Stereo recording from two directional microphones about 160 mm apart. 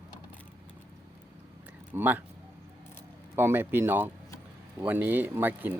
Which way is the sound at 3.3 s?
15° right (ahead or behind).